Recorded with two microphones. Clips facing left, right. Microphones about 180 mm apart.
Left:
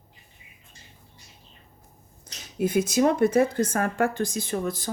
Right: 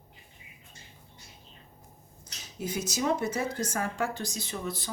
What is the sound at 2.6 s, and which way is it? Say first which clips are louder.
Speech: left 10 dB; 55° left (ahead or behind).